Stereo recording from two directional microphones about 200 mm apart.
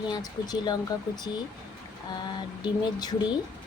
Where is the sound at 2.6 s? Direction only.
20° left (ahead or behind).